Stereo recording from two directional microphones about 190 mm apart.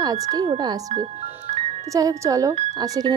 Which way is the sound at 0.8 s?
35° right (ahead or behind).